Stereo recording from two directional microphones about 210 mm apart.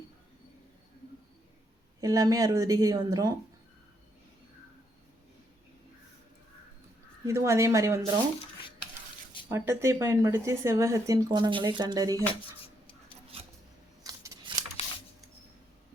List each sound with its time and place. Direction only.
2.0 s speech: 15° right (ahead or behind)
7.3 s speech: 15° right (ahead or behind)
9.5 s speech: 15° right (ahead or behind)
14.0 s scissors: 15° right (ahead or behind)